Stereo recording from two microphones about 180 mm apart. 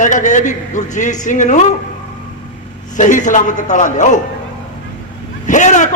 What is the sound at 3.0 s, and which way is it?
A man's voice, 45° left (ahead or behind).